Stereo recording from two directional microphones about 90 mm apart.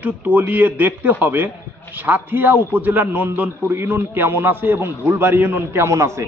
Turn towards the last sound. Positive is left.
turn(degrees=-35)  # may be behind; listen again after turning